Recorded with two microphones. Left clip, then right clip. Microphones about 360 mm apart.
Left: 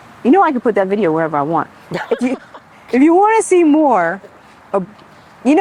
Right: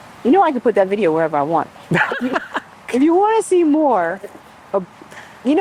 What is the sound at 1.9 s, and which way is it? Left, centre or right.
Speech, right.